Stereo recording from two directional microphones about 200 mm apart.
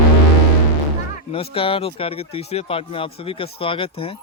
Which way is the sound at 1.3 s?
25° left (ahead or behind).